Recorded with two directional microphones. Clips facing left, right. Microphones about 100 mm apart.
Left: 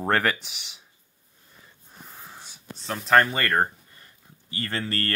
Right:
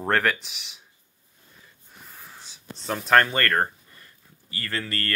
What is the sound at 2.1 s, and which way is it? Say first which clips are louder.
Wheeze: left 2 dB; 20° left (ahead or behind).